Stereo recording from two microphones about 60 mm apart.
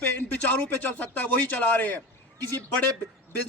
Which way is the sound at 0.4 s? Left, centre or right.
Left.